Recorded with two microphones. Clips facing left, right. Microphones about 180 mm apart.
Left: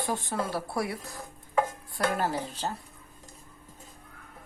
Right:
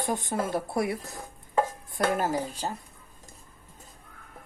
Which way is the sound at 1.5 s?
20° right (ahead or behind).